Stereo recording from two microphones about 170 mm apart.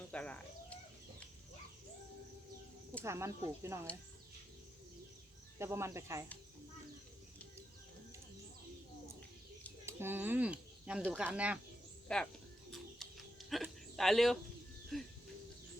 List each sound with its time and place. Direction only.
0.1 s bird: 5° left (ahead or behind)
3.0 s speech: 15° right (ahead or behind)
5.5 s speech: 15° right (ahead or behind)
9.8 s speech: 15° right (ahead or behind)
12.0 s speech: 5° left (ahead or behind)
13.0 s a sound: centre (ahead or behind)
14.9 s bird: centre (ahead or behind)